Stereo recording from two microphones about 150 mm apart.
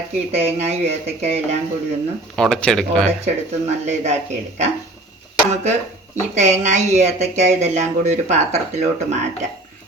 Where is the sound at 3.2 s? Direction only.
50° right (ahead or behind).